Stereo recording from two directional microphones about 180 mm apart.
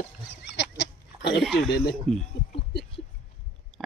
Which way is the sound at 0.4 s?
70° left (ahead or behind).